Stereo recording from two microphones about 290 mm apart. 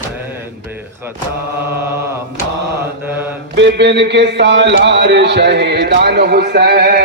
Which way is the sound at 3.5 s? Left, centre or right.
Right.